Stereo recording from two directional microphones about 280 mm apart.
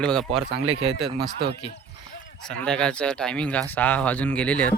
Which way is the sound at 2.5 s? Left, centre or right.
Centre.